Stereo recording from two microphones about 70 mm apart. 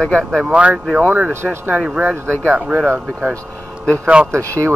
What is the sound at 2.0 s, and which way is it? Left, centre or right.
Speech, right.